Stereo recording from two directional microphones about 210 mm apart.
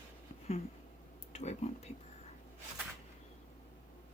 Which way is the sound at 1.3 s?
30° left (ahead or behind).